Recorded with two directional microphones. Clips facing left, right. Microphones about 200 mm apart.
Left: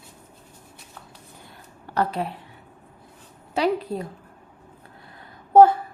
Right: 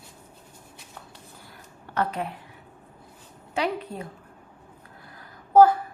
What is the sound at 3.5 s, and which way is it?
Speech, 35° left (ahead or behind).